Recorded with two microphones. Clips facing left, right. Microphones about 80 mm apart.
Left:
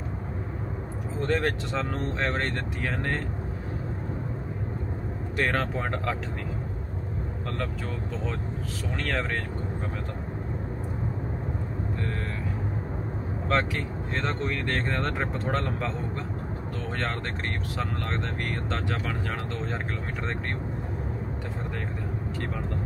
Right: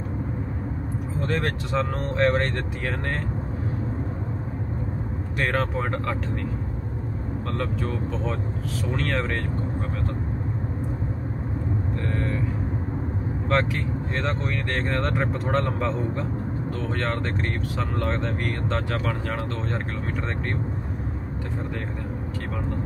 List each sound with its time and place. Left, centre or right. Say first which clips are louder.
1.2 s speech: left 1 dB; centre
5.4 s speech: right 2 dB; centre
8.9 s speech: right 2 dB; centre
13.5 s speech: right 2 dB; centre
17.7 s speech: right 5 dB; centre